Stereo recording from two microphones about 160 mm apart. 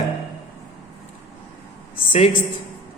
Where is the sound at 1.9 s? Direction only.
35° left (ahead or behind).